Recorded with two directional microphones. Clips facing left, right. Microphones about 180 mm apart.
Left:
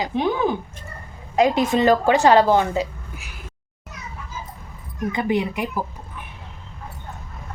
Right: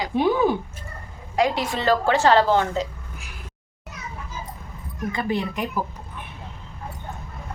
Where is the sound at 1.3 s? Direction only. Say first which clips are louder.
Left 5 dB; 20° left (ahead or behind).